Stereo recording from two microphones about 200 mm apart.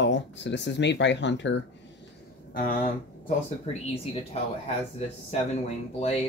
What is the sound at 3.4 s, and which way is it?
Speech, 30° left (ahead or behind).